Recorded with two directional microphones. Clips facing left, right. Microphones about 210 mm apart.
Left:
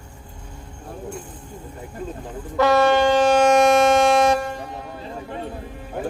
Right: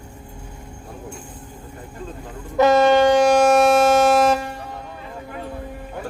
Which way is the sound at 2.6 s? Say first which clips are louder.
Right 2 dB; 20° right (ahead or behind).